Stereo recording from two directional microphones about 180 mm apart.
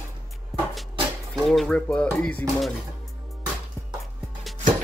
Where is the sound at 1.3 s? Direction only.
Centre (ahead or behind).